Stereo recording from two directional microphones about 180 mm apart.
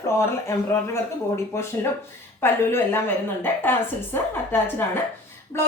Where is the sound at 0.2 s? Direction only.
15° left (ahead or behind).